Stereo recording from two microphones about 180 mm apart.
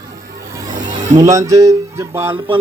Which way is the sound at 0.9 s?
45° right (ahead or behind).